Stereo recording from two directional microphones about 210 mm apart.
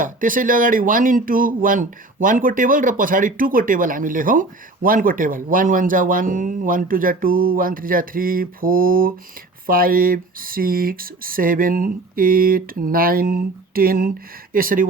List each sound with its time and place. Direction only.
0.0 s speech: 40° right (ahead or behind)